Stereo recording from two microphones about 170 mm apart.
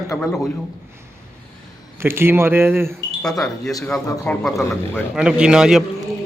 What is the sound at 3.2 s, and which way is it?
A man's voice, 5° left (ahead or behind).